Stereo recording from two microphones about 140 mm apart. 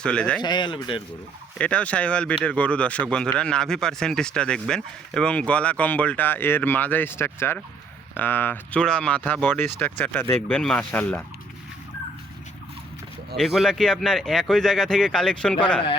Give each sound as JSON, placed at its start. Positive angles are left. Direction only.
{"t": 0.0, "sound": "speech", "side_deg": 5}
{"t": 0.4, "sound": "speech", "side_deg": 35}
{"t": 1.5, "sound": "speech", "side_deg": 10}
{"t": 13.3, "sound": "speech", "side_deg": 0}